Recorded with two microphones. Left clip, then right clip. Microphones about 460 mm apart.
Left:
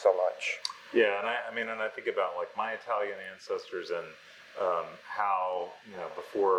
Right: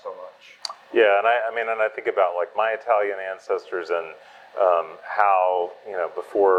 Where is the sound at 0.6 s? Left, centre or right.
Right.